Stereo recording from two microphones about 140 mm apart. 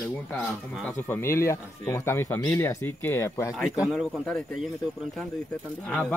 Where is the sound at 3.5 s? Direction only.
5° right (ahead or behind).